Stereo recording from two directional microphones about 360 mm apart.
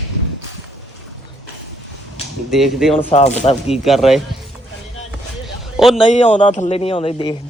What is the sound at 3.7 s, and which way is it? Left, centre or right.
Speech, centre.